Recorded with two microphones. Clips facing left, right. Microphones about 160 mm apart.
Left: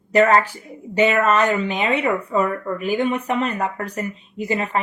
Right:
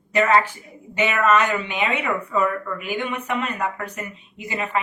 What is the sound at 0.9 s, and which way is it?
Speech, 35° left (ahead or behind).